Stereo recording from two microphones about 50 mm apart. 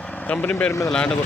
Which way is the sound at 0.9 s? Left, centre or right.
Centre.